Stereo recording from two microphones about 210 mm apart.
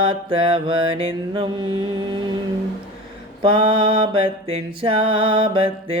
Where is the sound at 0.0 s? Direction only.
25° right (ahead or behind).